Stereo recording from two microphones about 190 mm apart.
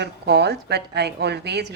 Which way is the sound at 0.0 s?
60° right (ahead or behind).